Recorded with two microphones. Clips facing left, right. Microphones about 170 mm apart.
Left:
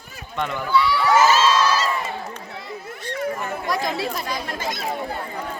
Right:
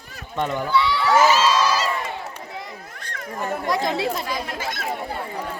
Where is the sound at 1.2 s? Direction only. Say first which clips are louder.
Even; 10° right (ahead or behind).